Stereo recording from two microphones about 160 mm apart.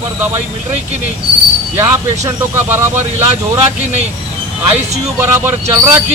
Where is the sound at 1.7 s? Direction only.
20° right (ahead or behind).